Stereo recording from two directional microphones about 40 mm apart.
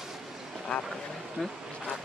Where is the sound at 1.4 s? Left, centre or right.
Centre.